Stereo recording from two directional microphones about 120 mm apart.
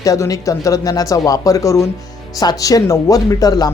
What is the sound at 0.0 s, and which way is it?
Speech, 25° left (ahead or behind).